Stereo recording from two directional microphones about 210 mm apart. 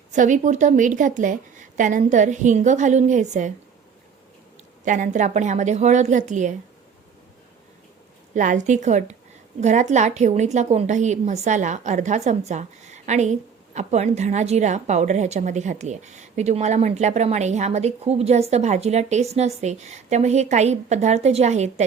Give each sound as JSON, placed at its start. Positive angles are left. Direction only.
{"t": 0.1, "sound": "a woman's voice", "side_deg": -35}
{"t": 4.9, "sound": "a woman's voice", "side_deg": -35}
{"t": 8.3, "sound": "a woman's voice", "side_deg": -35}